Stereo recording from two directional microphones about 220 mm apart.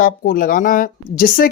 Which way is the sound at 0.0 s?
40° left (ahead or behind).